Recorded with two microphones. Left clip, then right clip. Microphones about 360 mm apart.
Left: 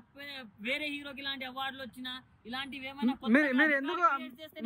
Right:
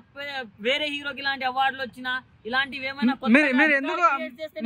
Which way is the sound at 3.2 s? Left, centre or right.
Centre.